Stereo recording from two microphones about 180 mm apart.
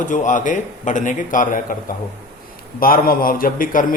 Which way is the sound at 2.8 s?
55° left (ahead or behind).